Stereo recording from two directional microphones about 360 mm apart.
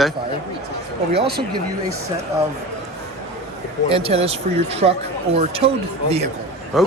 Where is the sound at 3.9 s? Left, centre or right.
Centre.